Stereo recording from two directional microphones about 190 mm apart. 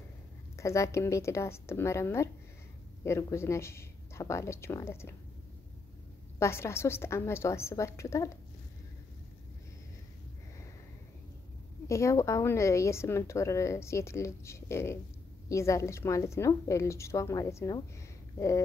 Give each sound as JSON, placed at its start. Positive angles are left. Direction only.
{"t": 0.6, "sound": "a woman's voice", "side_deg": 15}
{"t": 6.4, "sound": "a woman's voice", "side_deg": 15}
{"t": 11.9, "sound": "a woman's voice", "side_deg": 15}